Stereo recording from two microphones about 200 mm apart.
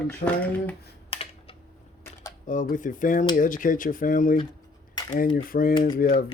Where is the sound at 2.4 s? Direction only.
40° left (ahead or behind).